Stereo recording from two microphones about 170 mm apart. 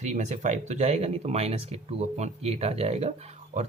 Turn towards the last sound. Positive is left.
turn(degrees=-40)  # may be behind; listen again after turning